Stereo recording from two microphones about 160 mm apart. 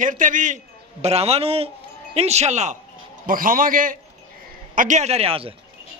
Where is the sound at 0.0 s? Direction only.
55° right (ahead or behind).